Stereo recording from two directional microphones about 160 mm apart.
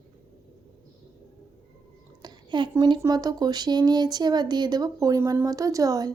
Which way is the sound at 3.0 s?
25° right (ahead or behind).